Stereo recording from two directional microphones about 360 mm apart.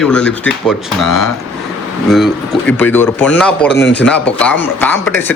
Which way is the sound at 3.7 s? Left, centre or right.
Left.